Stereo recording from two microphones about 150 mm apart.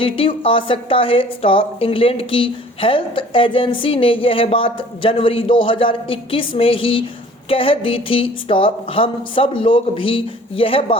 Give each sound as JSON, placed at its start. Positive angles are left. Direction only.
{"t": 0.0, "sound": "a woman's voice", "side_deg": 35}